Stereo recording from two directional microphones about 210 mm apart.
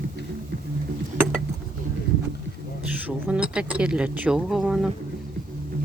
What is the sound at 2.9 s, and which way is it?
Speech, 5° right (ahead or behind).